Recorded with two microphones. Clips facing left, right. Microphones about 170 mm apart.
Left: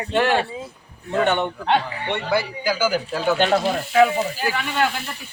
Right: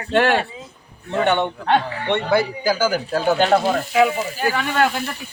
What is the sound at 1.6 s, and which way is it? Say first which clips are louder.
A man's voice: right 2 dB; 50° right (ahead or behind).